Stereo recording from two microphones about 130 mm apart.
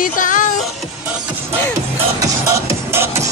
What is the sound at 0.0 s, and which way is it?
Music, 90° left.